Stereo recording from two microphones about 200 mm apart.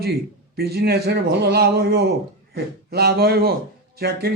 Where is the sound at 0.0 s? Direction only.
55° right (ahead or behind).